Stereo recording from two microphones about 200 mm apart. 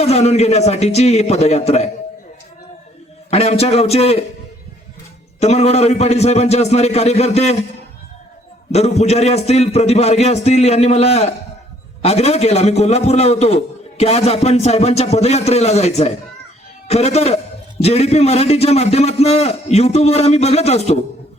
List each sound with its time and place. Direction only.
0.0 s a man's voice: 30° left (ahead or behind)
3.2 s a man's voice: 30° left (ahead or behind)
5.4 s a man's voice: 35° left (ahead or behind)
8.7 s a man's voice: 30° left (ahead or behind)